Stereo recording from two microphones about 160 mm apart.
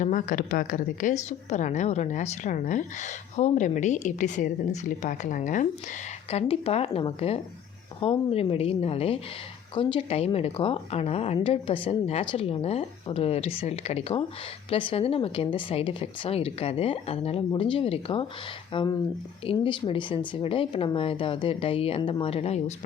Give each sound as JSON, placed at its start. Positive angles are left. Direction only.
{"t": 0.0, "sound": "a woman's voice", "side_deg": 55}
{"t": 6.3, "sound": "speech", "side_deg": 40}